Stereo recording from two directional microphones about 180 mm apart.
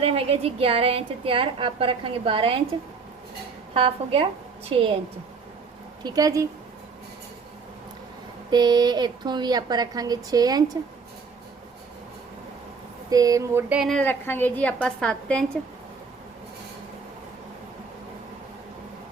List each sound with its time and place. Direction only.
0.0 s a woman's voice: 30° right (ahead or behind)
3.8 s a woman's voice: 30° right (ahead or behind)
6.0 s a woman's voice: 20° right (ahead or behind)
8.4 s a woman's voice: 25° right (ahead or behind)
13.1 s a woman's voice: 20° right (ahead or behind); by 15.4 s 5° left (ahead or behind)